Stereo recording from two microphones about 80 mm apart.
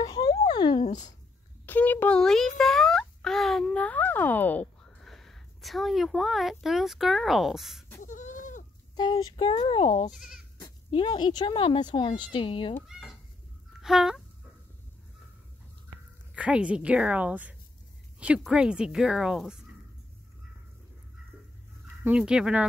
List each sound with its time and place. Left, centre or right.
0.5 s speech: left
1.7 s speech: left
2.1 s a sound: centre
3.8 s speech: left
5.0 s speech: centre
8.9 s speech: left
10.1 s a woman's voice: centre
10.9 s a woman's voice: left
12.8 s a sound: centre
13.7 s speech: centre
16.3 s a woman's voice: centre
22.1 s a woman's voice: centre